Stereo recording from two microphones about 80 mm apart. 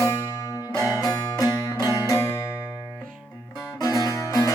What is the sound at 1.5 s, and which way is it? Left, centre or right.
Music, left.